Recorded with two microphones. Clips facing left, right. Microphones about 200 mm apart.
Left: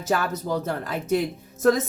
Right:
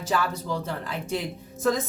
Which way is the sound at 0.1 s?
45° left (ahead or behind).